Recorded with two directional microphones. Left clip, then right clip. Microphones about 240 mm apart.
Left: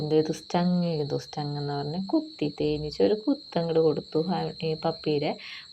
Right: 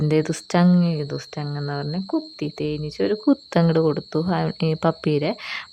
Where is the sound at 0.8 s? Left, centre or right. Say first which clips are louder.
Right 2 dB; right.